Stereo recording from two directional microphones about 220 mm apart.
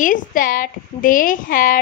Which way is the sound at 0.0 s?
35° left (ahead or behind).